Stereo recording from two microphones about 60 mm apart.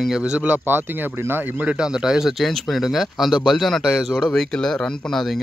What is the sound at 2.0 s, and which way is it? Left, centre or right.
Speech, centre.